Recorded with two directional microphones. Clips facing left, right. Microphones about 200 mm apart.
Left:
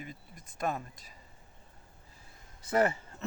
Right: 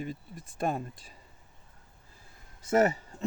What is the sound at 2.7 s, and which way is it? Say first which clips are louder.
Speech: right 3 dB; 20° right (ahead or behind).